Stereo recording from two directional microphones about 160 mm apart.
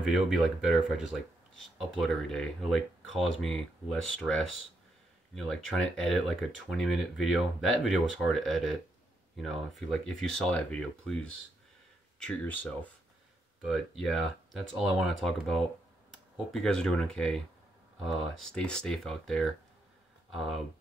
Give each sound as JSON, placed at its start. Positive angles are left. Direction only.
{"t": 0.0, "sound": "speech", "side_deg": 0}
{"t": 9.8, "sound": "speech", "side_deg": 0}
{"t": 16.3, "sound": "speech", "side_deg": 5}